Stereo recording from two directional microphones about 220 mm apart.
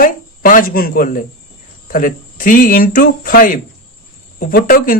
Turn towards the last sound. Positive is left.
turn(degrees=40)  # may be behind; listen again after turning